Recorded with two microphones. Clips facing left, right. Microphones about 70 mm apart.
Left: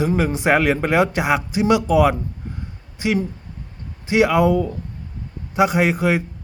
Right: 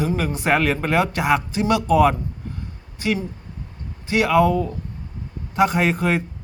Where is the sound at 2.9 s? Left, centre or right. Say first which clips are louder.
Left 3 dB; left.